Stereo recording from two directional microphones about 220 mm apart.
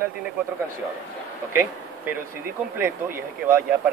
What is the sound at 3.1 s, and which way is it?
Speech, 10° right (ahead or behind).